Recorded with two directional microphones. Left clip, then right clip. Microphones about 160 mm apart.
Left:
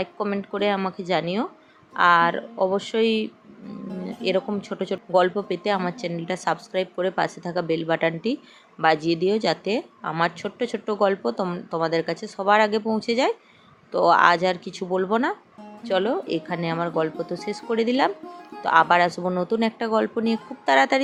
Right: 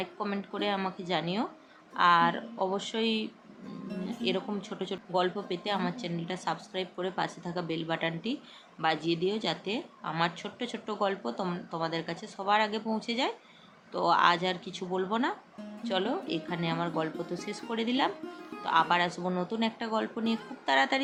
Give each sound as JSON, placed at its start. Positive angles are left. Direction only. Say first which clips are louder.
{"t": 0.0, "sound": "a woman's voice", "louder": "left 8 dB", "side_deg": 25}